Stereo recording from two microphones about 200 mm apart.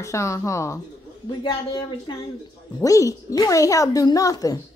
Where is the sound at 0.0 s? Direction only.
15° left (ahead or behind).